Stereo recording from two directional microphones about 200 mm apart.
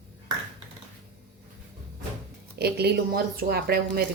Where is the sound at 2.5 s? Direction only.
55° right (ahead or behind).